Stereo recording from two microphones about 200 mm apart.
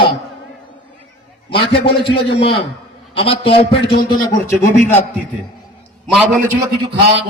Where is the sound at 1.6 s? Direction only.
55° left (ahead or behind).